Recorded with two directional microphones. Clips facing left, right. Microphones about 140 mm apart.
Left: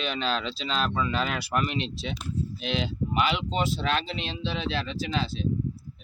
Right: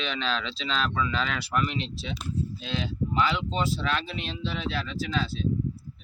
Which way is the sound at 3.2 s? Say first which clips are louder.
Left 1 dB; 20° left (ahead or behind).